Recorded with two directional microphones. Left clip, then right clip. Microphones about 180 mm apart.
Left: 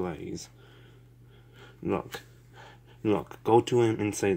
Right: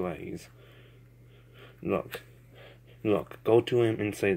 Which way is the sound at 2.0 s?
20° left (ahead or behind).